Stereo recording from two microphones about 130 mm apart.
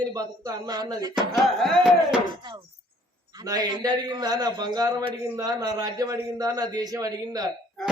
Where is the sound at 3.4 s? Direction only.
30° right (ahead or behind).